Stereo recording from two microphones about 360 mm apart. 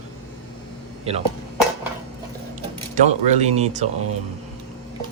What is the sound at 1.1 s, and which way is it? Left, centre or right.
Speech, centre.